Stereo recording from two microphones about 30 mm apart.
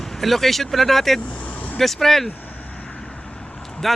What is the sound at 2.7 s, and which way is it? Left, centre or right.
Vehicle, left.